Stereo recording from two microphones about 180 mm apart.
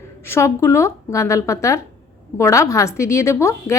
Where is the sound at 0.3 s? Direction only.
15° left (ahead or behind).